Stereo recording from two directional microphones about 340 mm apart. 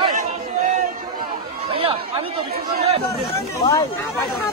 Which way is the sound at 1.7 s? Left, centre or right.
Centre.